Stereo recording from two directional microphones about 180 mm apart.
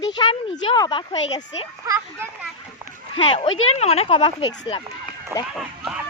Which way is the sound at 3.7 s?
35° left (ahead or behind).